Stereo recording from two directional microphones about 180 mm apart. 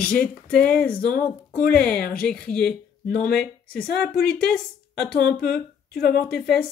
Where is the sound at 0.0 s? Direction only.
5° left (ahead or behind).